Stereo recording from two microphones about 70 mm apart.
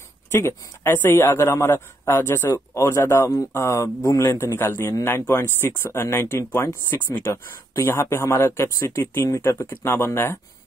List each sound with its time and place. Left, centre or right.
0.3 s a man's voice: left
4.5 s a man's voice: left
5.9 s a man's voice: left